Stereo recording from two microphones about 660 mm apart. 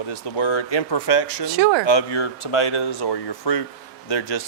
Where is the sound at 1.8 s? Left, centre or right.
Left.